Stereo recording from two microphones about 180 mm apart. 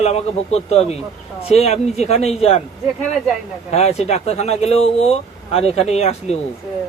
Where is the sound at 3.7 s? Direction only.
35° left (ahead or behind).